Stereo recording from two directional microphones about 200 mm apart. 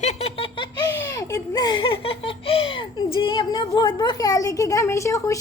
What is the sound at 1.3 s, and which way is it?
A woman's voice, 20° left (ahead or behind).